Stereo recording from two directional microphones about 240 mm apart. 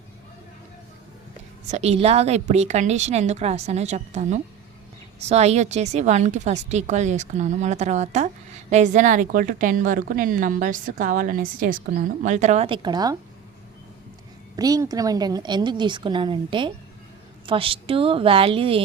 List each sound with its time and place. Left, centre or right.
1.6 s a woman's voice: right
14.5 s a woman's voice: centre